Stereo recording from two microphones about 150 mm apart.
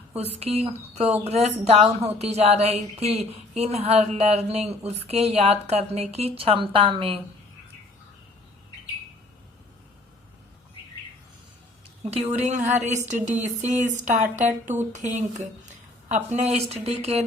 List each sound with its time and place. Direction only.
0.2 s speech: 45° right (ahead or behind)
12.1 s speech: 45° right (ahead or behind)